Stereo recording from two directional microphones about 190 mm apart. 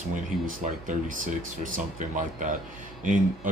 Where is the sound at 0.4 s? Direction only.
45° right (ahead or behind).